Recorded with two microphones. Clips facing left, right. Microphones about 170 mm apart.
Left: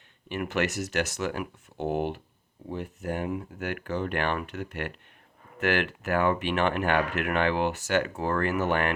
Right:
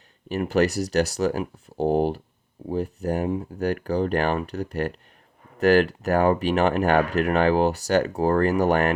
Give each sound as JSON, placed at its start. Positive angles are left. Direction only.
{"t": 0.3, "sound": "speech", "side_deg": -35}